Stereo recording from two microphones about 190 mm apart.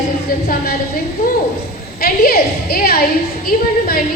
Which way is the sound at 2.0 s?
50° left (ahead or behind).